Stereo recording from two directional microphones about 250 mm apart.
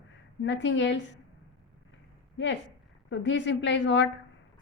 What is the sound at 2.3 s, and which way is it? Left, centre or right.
A woman's voice, left.